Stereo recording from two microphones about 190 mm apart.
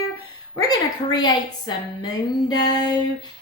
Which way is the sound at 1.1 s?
20° left (ahead or behind).